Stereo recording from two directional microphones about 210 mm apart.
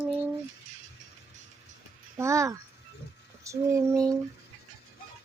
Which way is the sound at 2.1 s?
15° right (ahead or behind).